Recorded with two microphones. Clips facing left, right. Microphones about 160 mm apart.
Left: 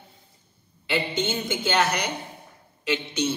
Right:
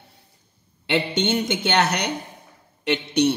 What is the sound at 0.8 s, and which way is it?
Speech, 75° right (ahead or behind).